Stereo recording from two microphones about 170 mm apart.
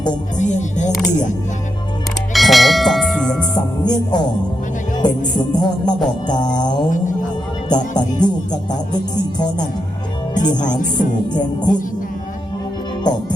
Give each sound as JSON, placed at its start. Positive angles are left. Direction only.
{"t": 0.3, "sound": "music", "side_deg": 45}
{"t": 2.3, "sound": "speech", "side_deg": 0}
{"t": 3.8, "sound": "music", "side_deg": 25}
{"t": 5.5, "sound": "music", "side_deg": 25}
{"t": 10.3, "sound": "music", "side_deg": 45}
{"t": 10.9, "sound": "music", "side_deg": 25}
{"t": 13.1, "sound": "music", "side_deg": 25}